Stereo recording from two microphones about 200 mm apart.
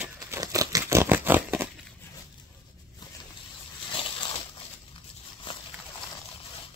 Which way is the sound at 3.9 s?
25° left (ahead or behind).